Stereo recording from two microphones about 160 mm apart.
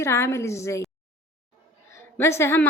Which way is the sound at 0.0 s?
15° left (ahead or behind).